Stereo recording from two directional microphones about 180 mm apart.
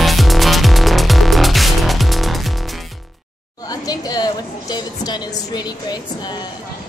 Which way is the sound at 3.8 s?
20° left (ahead or behind).